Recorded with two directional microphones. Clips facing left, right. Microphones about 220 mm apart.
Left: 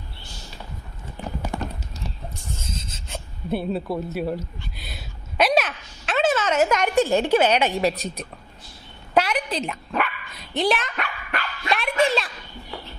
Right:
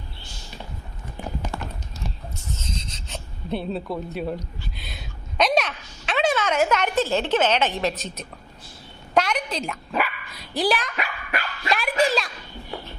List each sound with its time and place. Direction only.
1.5 s clip-clop: 20° left (ahead or behind)
2.3 s rub: 10° left (ahead or behind)
2.7 s writing: 50° left (ahead or behind)
3.1 s a sound: 5° left (ahead or behind)
6.7 s a woman's voice: 10° left (ahead or behind)
9.1 s a sound: 5° left (ahead or behind)
9.6 s speech: centre (ahead or behind)
10.6 s dog: centre (ahead or behind)